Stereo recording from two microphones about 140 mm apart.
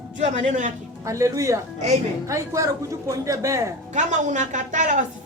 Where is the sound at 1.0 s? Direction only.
20° right (ahead or behind).